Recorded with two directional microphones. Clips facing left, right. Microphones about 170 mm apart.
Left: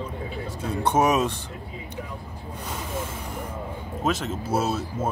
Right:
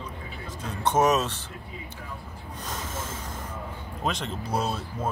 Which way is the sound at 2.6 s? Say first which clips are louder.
Left 3 dB; 10° left (ahead or behind).